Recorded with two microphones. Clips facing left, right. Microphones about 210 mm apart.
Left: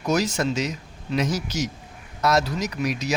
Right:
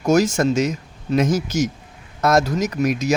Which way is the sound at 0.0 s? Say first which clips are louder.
Right 6 dB; 45° right (ahead or behind).